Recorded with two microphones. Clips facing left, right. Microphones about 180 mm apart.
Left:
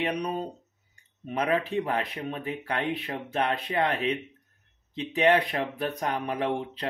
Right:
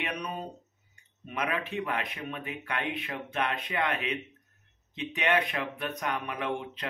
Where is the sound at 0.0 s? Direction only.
30° left (ahead or behind).